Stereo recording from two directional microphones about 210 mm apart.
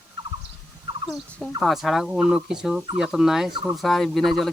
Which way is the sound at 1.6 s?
Centre (ahead or behind).